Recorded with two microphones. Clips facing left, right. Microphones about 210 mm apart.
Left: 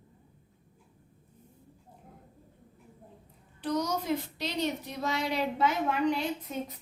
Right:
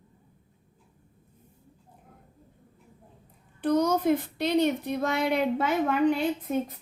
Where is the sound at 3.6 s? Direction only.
55° right (ahead or behind).